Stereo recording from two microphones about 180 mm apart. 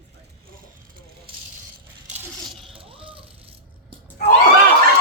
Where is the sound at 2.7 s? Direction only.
30° right (ahead or behind).